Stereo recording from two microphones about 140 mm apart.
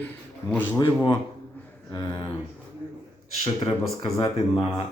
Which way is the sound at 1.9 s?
30° left (ahead or behind).